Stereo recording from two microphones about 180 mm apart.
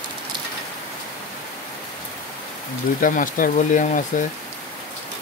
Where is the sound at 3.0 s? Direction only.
50° left (ahead or behind).